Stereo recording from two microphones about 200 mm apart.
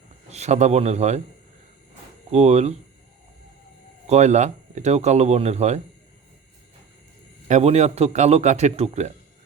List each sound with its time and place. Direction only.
0.3 s speech: 35° right (ahead or behind)
2.3 s speech: 35° right (ahead or behind)
4.0 s speech: 35° right (ahead or behind)
7.4 s speech: 35° right (ahead or behind)